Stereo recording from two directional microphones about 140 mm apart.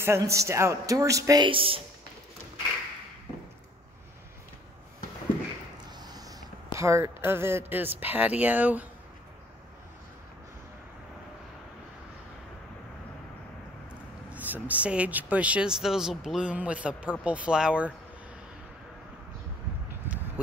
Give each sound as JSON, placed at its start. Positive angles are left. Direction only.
{"t": 0.0, "sound": "a woman's voice", "side_deg": -20}
{"t": 1.4, "sound": "speech", "side_deg": -40}
{"t": 5.9, "sound": "speech", "side_deg": -30}
{"t": 14.3, "sound": "speech", "side_deg": -10}